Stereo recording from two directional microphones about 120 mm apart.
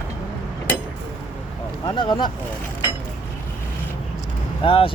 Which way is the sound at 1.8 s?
40° left (ahead or behind).